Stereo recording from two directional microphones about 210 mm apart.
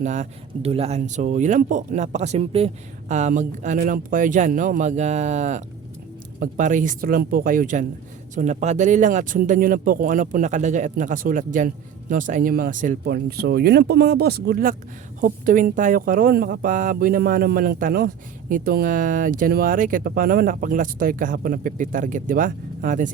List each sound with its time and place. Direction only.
0.0 s speech: 35° right (ahead or behind)